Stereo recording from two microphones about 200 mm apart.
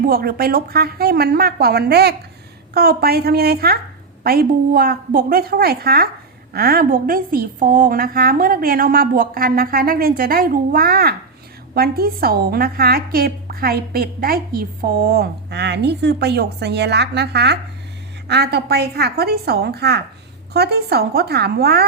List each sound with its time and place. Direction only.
0.1 s a woman's voice: 50° right (ahead or behind)